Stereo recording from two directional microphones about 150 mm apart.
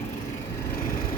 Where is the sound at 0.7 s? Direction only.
20° left (ahead or behind).